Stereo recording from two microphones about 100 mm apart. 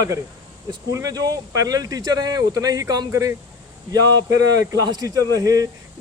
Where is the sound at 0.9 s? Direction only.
35° right (ahead or behind).